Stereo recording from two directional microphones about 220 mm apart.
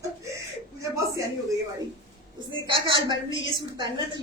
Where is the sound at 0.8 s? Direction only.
15° right (ahead or behind).